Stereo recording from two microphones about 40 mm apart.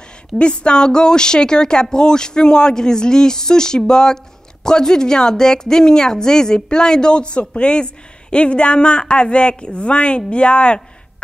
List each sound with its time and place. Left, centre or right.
0.4 s a woman's voice: left